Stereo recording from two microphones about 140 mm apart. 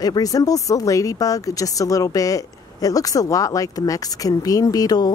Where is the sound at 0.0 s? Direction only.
25° left (ahead or behind).